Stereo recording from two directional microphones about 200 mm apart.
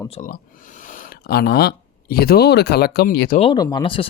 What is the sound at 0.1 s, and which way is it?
Speech, 40° left (ahead or behind).